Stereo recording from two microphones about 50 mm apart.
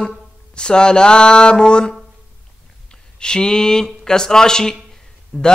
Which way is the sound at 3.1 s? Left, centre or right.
Centre.